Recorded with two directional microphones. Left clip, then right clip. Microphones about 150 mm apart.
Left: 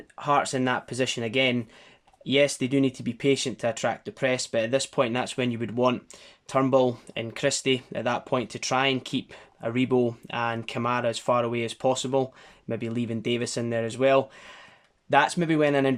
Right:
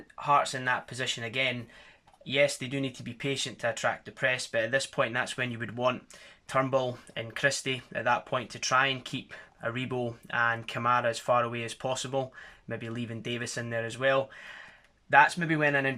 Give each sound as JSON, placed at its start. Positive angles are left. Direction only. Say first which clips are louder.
{"t": 0.2, "sound": "speech", "louder": "left 2 dB", "side_deg": 45}